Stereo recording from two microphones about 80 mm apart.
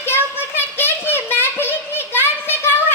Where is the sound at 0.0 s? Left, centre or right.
Left.